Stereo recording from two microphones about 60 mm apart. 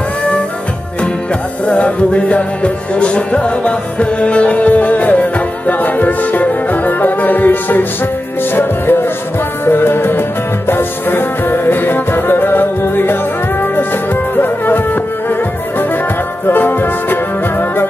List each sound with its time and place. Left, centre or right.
1.7 s music: left
16.4 s music: left